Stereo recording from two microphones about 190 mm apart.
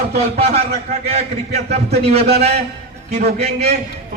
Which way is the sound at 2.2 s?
55° right (ahead or behind).